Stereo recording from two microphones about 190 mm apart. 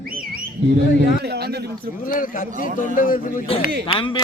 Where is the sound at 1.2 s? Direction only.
60° right (ahead or behind).